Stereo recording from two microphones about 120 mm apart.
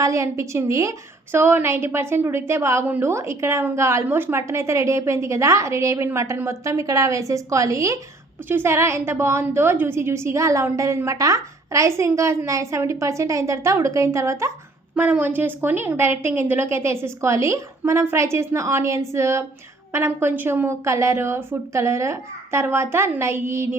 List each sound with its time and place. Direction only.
0.0 s a woman's voice: 25° right (ahead or behind)